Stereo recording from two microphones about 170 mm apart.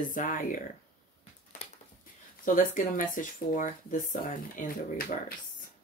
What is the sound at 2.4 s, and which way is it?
Speech, 50° left (ahead or behind).